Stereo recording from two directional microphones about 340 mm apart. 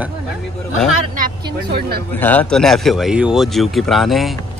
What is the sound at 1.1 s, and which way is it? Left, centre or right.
Speech, right.